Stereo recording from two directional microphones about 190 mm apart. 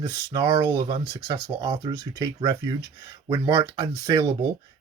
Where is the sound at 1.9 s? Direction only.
15° right (ahead or behind).